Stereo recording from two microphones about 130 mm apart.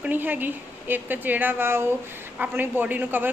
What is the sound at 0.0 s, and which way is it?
A woman's voice, 15° right (ahead or behind).